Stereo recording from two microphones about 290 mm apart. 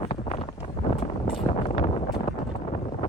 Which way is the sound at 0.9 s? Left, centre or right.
Centre.